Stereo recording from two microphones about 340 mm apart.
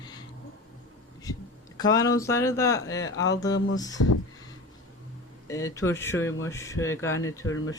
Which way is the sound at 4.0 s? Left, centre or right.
Left.